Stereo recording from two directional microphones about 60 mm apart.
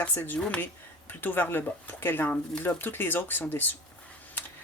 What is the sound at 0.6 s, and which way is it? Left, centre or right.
Speech, left.